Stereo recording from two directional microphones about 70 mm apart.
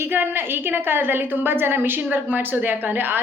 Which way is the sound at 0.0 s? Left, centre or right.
Right.